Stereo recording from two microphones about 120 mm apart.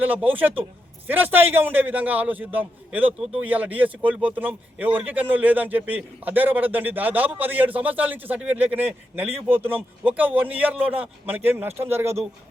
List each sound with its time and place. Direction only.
0.0 s a man's voice: 15° right (ahead or behind)